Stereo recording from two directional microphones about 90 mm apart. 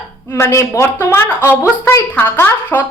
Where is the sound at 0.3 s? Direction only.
30° left (ahead or behind).